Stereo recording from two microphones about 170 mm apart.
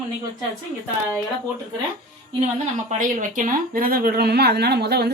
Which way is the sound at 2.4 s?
45° right (ahead or behind).